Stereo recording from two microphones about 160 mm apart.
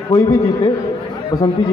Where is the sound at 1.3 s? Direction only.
25° left (ahead or behind).